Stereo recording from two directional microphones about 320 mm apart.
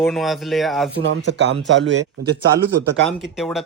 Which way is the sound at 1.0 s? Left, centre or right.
Right.